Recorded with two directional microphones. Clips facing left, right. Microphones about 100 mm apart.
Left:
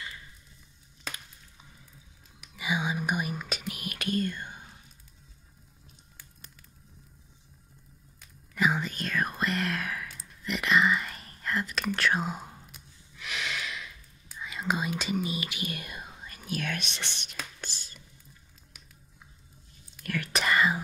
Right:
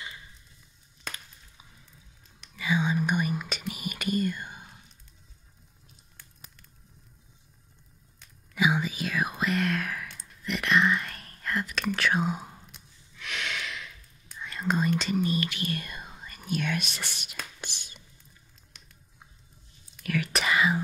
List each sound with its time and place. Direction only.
1.1 s a sound: centre (ahead or behind)
2.4 s whispering: 10° left (ahead or behind); by 4.6 s 5° right (ahead or behind)
8.2 s whispering: centre (ahead or behind)
17.6 s whispering: 15° right (ahead or behind)
20.0 s whispering: centre (ahead or behind)